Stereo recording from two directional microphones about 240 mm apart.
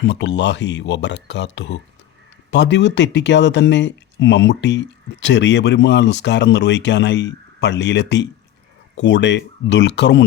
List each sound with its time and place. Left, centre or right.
0.0 s speech: left